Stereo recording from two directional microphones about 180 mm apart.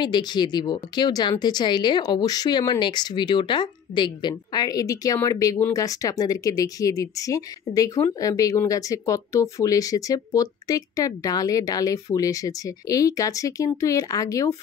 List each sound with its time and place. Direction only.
0.0 s speech: 25° left (ahead or behind)